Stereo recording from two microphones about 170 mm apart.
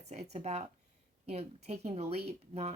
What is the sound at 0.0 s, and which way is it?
Speech, 40° right (ahead or behind).